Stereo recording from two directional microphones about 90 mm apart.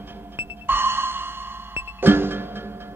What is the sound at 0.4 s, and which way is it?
Music, 25° right (ahead or behind).